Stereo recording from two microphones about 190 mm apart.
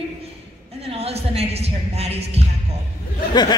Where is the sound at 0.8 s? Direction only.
30° right (ahead or behind).